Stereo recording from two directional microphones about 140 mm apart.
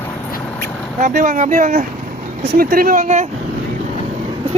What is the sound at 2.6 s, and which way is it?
Speech, 90° right.